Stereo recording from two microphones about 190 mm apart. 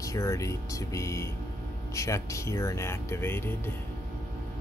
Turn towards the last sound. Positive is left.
turn(degrees=10)  # may be behind; listen again after turning